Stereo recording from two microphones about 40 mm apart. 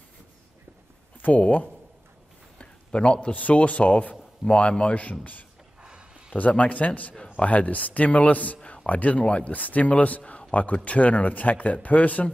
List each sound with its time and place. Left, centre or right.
1.2 s a man's voice: left
2.6 s a sound: left
3.3 s a man's voice: left
5.8 s a sound: right
6.3 s a man's voice: left
8.6 s music: left
9.4 s a man's voice: left